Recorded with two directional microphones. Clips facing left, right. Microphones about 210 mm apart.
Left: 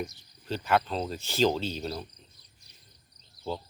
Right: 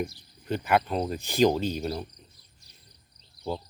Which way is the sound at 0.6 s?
10° right (ahead or behind).